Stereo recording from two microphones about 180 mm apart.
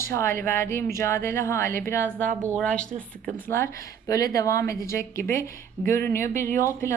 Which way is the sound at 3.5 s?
15° left (ahead or behind).